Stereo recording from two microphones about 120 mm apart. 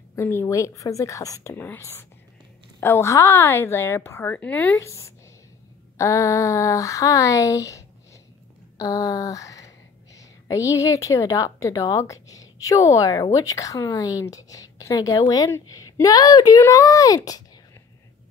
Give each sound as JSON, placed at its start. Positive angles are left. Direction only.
{"t": 0.1, "sound": "a woman's voice", "side_deg": 20}
{"t": 4.7, "sound": "a woman's voice", "side_deg": 25}
{"t": 8.7, "sound": "a sound", "side_deg": 30}
{"t": 10.1, "sound": "a woman's voice", "side_deg": 25}